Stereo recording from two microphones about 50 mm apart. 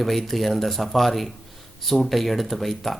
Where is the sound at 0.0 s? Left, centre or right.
Centre.